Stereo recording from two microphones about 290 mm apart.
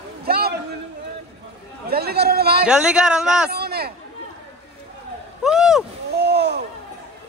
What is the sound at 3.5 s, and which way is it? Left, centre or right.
Speech, right.